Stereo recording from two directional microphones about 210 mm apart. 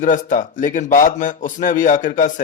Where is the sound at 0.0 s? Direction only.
40° left (ahead or behind).